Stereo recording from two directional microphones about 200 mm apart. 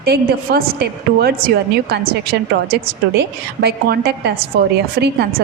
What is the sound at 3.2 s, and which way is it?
A woman's voice, 55° right (ahead or behind).